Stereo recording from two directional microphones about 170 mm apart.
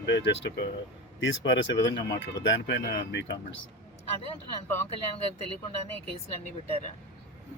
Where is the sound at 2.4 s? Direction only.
90° left.